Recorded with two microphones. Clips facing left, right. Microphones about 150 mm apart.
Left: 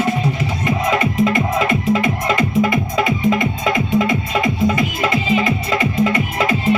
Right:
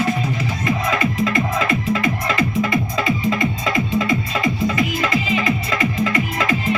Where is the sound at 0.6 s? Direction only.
25° left (ahead or behind).